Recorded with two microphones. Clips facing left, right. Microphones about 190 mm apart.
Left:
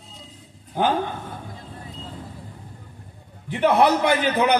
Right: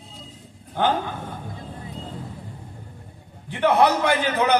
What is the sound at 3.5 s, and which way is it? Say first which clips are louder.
A man's voice: left 1 dB; 15° left (ahead or behind).